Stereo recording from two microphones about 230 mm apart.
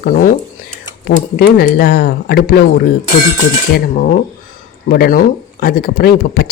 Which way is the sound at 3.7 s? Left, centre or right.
Left.